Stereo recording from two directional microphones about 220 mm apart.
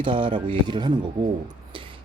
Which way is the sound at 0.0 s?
25° right (ahead or behind).